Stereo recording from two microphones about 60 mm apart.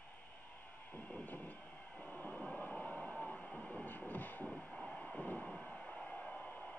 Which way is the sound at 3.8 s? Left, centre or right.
Left.